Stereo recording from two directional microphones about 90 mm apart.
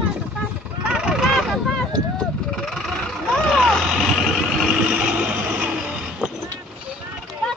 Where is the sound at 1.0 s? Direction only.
10° right (ahead or behind).